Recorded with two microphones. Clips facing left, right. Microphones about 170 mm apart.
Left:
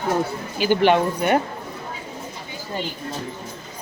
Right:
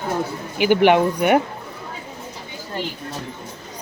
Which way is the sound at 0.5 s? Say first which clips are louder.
Right 3 dB; 15° right (ahead or behind).